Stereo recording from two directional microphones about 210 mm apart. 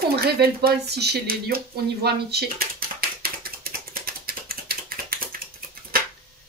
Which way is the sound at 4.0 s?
45° right (ahead or behind).